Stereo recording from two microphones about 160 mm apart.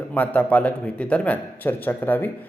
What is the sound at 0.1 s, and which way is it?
Speech, 10° left (ahead or behind).